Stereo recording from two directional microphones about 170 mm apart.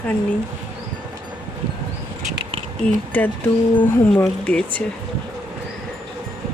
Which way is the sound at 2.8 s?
5° left (ahead or behind).